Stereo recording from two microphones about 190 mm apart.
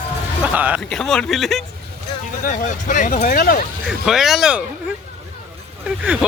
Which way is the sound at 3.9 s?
Centre (ahead or behind).